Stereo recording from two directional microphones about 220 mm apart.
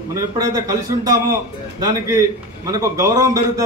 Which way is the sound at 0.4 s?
15° right (ahead or behind).